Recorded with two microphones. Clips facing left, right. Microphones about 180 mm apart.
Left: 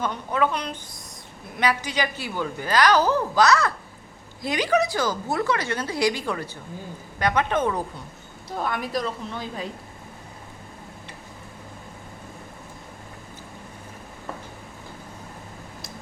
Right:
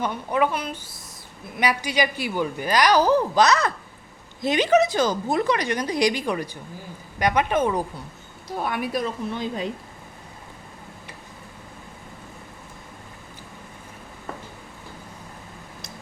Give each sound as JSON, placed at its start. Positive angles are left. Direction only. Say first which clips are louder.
{"t": 0.0, "sound": "a woman's voice", "louder": "right 1 dB", "side_deg": -15}